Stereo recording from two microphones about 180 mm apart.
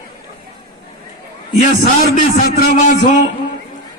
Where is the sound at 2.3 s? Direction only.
40° left (ahead or behind).